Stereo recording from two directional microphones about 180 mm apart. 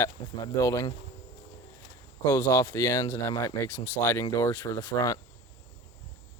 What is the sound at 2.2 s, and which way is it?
Speech, 15° left (ahead or behind).